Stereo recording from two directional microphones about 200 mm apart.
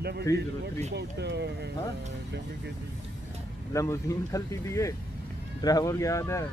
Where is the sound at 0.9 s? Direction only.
60° right (ahead or behind).